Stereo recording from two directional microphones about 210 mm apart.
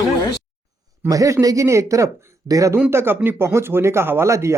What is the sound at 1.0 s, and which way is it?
Speech, 15° right (ahead or behind).